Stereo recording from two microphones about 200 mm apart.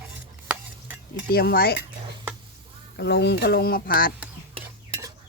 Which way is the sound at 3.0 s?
55° left (ahead or behind).